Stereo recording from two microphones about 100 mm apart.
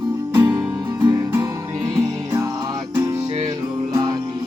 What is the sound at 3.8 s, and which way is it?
Music, 45° right (ahead or behind).